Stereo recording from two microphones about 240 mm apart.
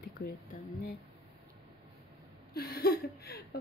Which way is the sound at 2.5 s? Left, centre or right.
Left.